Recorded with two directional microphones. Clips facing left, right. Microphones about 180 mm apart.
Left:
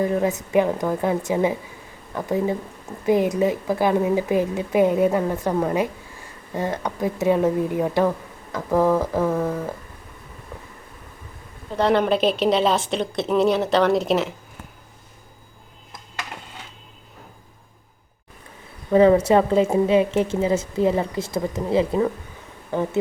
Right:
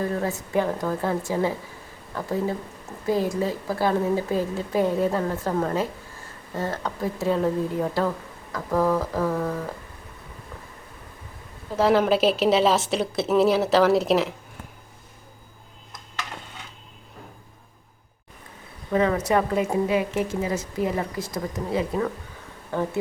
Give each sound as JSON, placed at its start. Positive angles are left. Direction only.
{"t": 0.0, "sound": "a woman's voice", "side_deg": 15}
{"t": 11.8, "sound": "a woman's voice", "side_deg": -5}
{"t": 18.9, "sound": "a woman's voice", "side_deg": 30}